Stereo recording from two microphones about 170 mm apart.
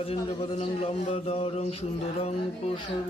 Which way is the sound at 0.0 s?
35° left (ahead or behind).